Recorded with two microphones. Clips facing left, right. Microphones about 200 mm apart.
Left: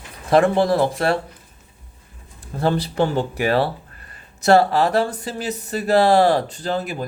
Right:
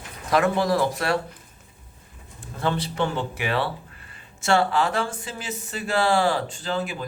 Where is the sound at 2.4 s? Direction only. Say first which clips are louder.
Left 5 dB; 35° left (ahead or behind).